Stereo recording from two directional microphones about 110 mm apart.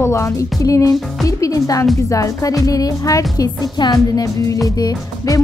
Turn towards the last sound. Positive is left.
turn(degrees=30)  # may be behind; listen again after turning